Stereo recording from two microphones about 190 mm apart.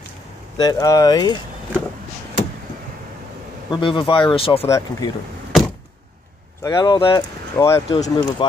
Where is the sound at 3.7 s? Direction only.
25° left (ahead or behind).